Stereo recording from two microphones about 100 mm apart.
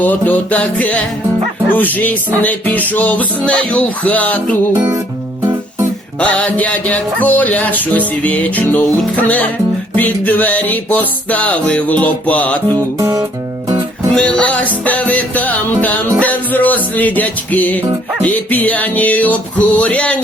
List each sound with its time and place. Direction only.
0.0 s music: 15° left (ahead or behind)
4.7 s music: 35° right (ahead or behind)
6.1 s music: 15° left (ahead or behind)
13.0 s music: 35° right (ahead or behind)
14.2 s music: 10° left (ahead or behind)